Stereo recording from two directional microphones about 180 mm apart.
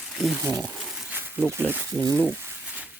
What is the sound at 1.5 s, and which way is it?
Speech, 10° right (ahead or behind).